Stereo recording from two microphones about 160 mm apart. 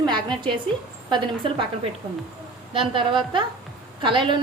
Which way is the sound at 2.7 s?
30° right (ahead or behind).